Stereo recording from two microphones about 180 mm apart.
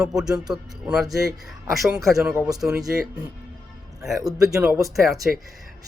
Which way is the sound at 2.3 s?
15° right (ahead or behind).